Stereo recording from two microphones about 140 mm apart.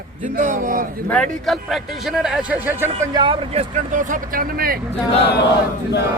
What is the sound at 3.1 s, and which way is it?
Speech, 35° right (ahead or behind).